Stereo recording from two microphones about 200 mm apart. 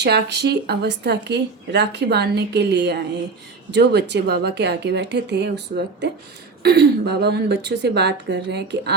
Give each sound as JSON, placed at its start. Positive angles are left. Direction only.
{"t": 0.0, "sound": "speech", "side_deg": -55}